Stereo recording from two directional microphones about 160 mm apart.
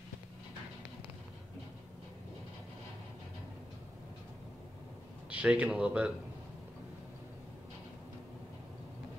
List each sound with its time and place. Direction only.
5.3 s speech: 10° right (ahead or behind)